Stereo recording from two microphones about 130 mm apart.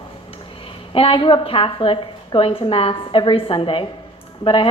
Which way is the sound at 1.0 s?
45° left (ahead or behind).